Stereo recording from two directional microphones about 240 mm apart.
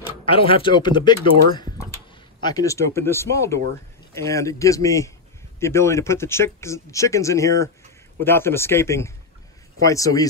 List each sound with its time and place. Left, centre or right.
0.2 s speech: left